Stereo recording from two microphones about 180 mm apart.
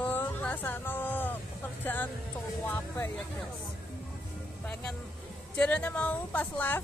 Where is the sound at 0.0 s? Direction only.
10° left (ahead or behind).